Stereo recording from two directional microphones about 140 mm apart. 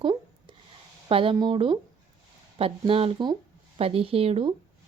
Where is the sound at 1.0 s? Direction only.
40° right (ahead or behind).